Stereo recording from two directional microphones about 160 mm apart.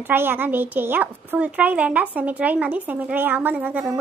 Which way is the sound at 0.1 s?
15° right (ahead or behind).